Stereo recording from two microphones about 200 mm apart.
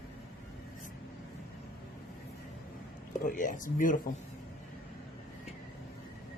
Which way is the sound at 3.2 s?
45° left (ahead or behind).